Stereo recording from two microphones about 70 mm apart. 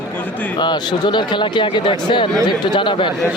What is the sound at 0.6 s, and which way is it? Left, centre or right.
Speech, left.